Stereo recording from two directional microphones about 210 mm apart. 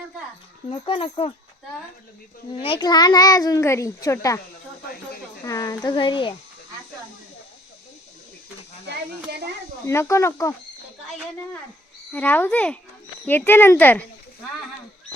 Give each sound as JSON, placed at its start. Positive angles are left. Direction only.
{"t": 0.7, "sound": "speech", "side_deg": 25}
{"t": 2.5, "sound": "a child's voice", "side_deg": 25}
{"t": 5.5, "sound": "speech", "side_deg": 20}
{"t": 9.3, "sound": "speech", "side_deg": -50}
{"t": 9.8, "sound": "a child's voice", "side_deg": 15}
{"t": 12.1, "sound": "a child's voice", "side_deg": 10}